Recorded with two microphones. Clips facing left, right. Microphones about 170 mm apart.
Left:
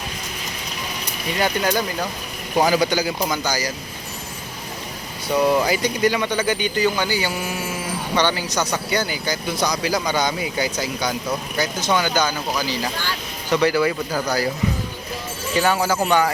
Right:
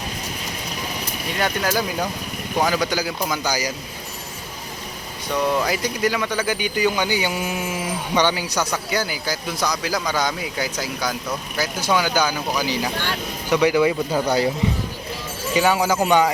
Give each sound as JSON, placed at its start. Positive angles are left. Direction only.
{"t": 1.3, "sound": "speech", "side_deg": 0}
{"t": 3.4, "sound": "speech", "side_deg": -10}
{"t": 5.3, "sound": "speech", "side_deg": 5}
{"t": 15.5, "sound": "speech", "side_deg": -10}